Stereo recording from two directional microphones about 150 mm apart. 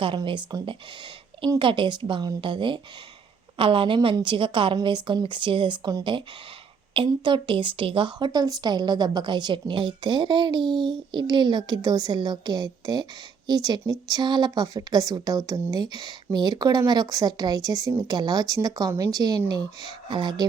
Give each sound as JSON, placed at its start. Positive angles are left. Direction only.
{"t": 0.0, "sound": "a woman's voice", "side_deg": -35}